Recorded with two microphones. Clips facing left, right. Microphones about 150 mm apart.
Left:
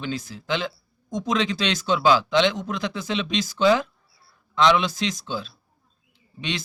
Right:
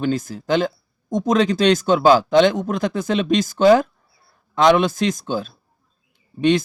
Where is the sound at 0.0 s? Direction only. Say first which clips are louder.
Right 9 dB; 45° right (ahead or behind).